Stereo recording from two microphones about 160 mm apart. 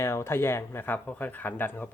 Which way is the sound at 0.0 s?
15° left (ahead or behind).